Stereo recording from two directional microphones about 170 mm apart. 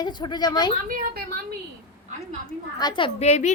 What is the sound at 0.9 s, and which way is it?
Speech, 55° right (ahead or behind).